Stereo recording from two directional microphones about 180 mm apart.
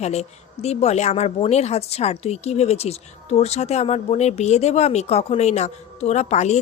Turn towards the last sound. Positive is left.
turn(degrees=40)  # may be behind; listen again after turning